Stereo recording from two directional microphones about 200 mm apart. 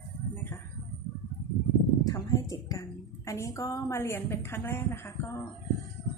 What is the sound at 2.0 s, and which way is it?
A woman's voice, 15° left (ahead or behind).